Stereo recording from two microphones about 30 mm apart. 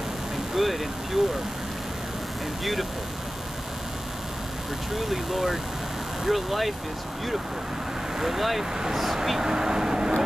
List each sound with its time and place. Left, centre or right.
0.6 s vehicle: centre
2.6 s speech: centre
4.9 s speech: centre
8.2 s speech: centre
9.4 s speech: right